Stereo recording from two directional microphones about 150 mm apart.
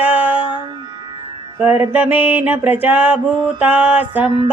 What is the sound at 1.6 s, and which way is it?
Speech, 10° right (ahead or behind).